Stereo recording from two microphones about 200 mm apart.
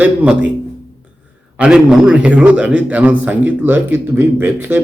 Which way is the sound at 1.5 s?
5° right (ahead or behind).